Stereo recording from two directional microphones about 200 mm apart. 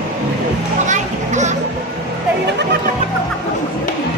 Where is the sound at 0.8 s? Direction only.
35° right (ahead or behind).